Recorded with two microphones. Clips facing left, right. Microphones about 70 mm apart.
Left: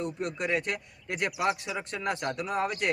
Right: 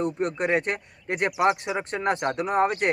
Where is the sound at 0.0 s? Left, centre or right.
Right.